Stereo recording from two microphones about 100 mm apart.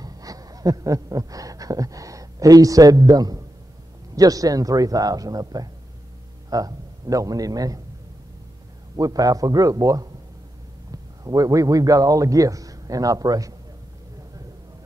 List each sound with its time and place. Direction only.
0.0 s speech: 35° right (ahead or behind)
8.9 s speech: 35° right (ahead or behind)